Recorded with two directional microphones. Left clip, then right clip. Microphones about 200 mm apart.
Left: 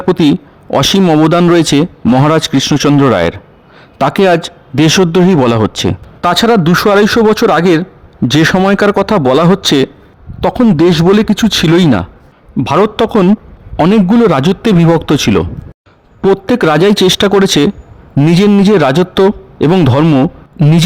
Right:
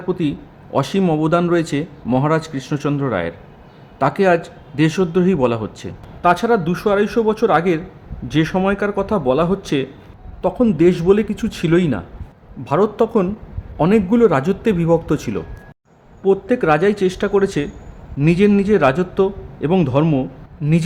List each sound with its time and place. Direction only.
0.1 s a man's voice: 50° left (ahead or behind)